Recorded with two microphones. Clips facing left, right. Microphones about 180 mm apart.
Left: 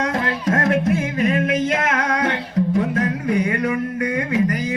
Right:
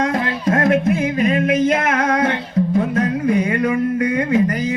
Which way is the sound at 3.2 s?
25° right (ahead or behind).